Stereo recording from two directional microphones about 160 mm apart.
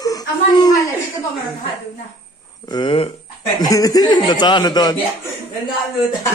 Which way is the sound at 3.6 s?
20° left (ahead or behind).